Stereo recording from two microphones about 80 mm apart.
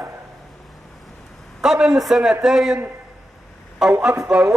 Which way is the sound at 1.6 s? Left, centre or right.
Centre.